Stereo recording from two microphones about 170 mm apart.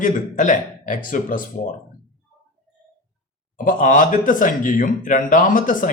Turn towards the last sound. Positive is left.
turn(degrees=50)  # may be behind; listen again after turning